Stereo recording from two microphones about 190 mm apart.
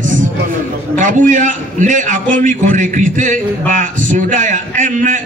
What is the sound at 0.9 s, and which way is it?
A man's voice, 40° right (ahead or behind).